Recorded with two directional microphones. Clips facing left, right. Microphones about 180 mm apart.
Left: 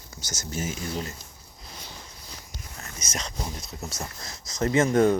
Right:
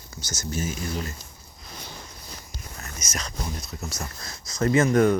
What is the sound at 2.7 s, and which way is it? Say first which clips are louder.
Speech: even; 30° left (ahead or behind).